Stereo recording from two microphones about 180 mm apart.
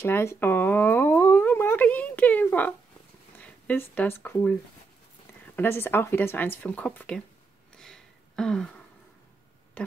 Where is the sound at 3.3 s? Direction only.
10° left (ahead or behind).